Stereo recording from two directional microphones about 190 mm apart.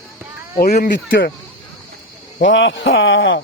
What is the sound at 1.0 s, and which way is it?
Speech, 70° left (ahead or behind).